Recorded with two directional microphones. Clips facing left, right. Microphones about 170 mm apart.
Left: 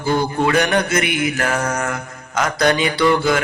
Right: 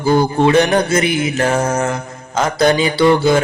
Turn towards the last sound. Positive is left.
turn(degrees=-30)  # may be behind; listen again after turning